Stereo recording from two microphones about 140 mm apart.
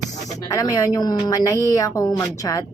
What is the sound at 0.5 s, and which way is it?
A woman's voice, 25° left (ahead or behind).